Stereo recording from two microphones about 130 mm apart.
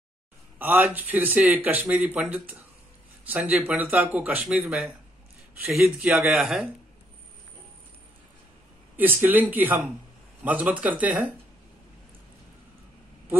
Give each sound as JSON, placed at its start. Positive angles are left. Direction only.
{"t": 0.6, "sound": "speech", "side_deg": -15}
{"t": 8.9, "sound": "speech", "side_deg": -15}